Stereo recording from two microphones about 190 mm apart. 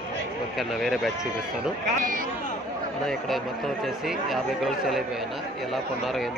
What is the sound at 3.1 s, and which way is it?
Speech, centre (ahead or behind).